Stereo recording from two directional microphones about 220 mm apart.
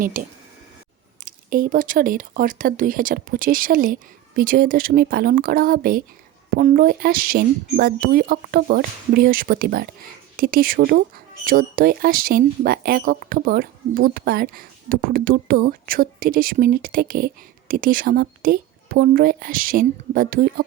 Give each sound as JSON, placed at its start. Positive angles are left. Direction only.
{"t": 0.0, "sound": "speech", "side_deg": -40}